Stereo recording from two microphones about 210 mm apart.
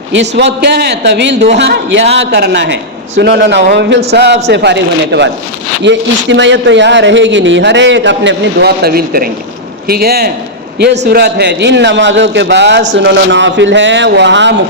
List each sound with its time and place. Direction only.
0.1 s a man's voice: 60° right (ahead or behind)